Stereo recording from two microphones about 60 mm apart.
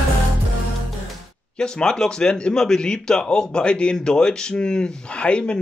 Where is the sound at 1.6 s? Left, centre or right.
Centre.